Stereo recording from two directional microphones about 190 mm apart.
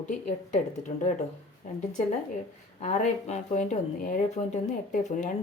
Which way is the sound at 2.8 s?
40° left (ahead or behind).